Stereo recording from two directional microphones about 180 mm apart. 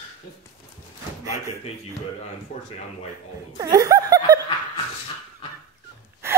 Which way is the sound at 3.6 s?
20° right (ahead or behind).